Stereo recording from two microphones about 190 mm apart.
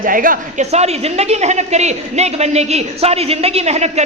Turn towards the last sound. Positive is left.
turn(degrees=-35)  # may be behind; listen again after turning